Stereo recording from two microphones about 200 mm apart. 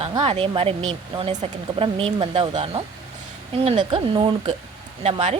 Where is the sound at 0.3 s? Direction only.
30° right (ahead or behind).